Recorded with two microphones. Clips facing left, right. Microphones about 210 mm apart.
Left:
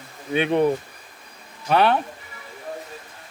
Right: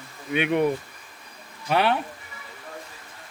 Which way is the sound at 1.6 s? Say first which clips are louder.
Left 4 dB; 45° left (ahead or behind).